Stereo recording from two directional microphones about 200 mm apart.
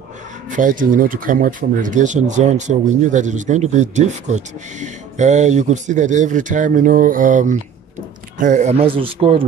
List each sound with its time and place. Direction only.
0.5 s a man's voice: 40° right (ahead or behind)